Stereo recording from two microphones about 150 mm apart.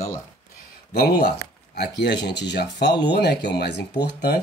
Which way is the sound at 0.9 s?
90° left.